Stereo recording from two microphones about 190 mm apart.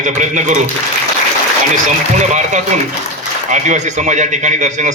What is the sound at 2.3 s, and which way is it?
A man's voice, 40° right (ahead or behind).